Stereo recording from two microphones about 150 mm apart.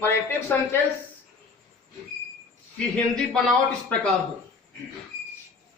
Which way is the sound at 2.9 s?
5° left (ahead or behind).